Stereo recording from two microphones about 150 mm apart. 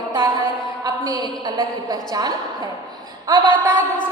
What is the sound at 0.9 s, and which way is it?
A woman's voice, 25° right (ahead or behind).